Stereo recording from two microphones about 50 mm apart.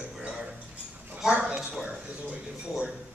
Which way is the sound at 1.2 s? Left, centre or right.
Centre.